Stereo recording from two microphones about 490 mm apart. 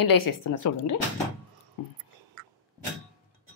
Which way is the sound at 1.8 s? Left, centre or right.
Left.